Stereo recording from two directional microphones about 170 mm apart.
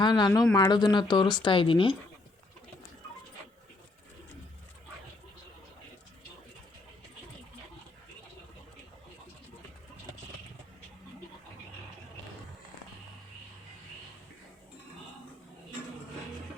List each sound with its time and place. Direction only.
0.0 s speech: 25° left (ahead or behind)